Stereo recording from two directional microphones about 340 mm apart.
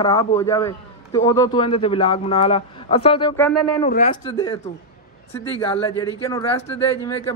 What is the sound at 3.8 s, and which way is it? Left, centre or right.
Speech, left.